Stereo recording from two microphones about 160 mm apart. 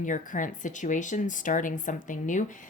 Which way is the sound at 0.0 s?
55° left (ahead or behind).